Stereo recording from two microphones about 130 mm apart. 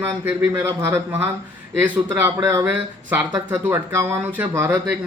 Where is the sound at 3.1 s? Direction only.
5° right (ahead or behind).